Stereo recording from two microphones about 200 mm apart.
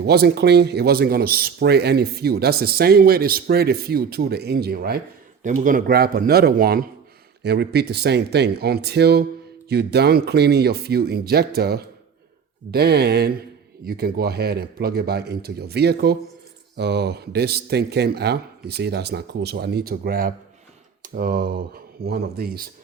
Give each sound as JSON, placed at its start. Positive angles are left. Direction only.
{"t": 0.0, "sound": "speech", "side_deg": -55}
{"t": 5.4, "sound": "speech", "side_deg": -40}